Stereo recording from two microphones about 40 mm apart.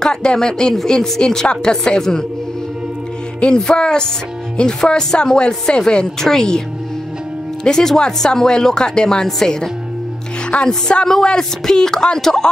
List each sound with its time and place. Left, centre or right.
0.0 s speech: centre
3.5 s speech: centre
7.6 s speech: centre
10.5 s music: left
11.1 s speech: centre